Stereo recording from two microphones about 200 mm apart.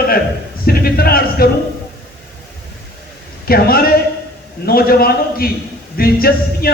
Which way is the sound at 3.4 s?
50° left (ahead or behind).